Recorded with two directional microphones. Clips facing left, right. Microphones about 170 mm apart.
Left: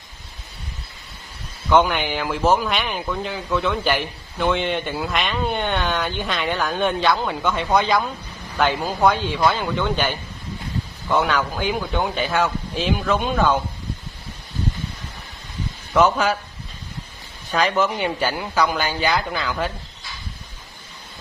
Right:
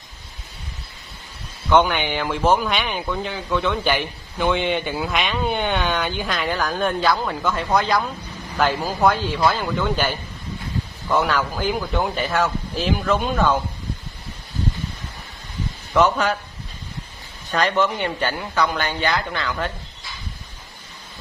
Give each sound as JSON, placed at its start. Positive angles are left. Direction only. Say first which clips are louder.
{"t": 1.7, "sound": "a man's voice", "louder": "even", "side_deg": 0}
{"t": 15.9, "sound": "a man's voice", "louder": "left 1 dB", "side_deg": 0}
{"t": 17.5, "sound": "a man's voice", "louder": "even", "side_deg": 0}